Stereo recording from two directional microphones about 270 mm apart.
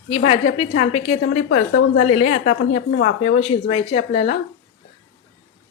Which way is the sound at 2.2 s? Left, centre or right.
Left.